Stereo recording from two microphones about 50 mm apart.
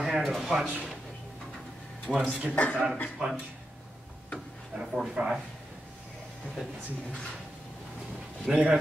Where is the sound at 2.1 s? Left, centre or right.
Centre.